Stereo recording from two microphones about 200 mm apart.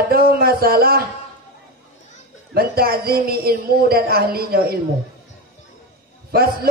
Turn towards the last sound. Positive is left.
turn(degrees=-50)  # may be behind; listen again after turning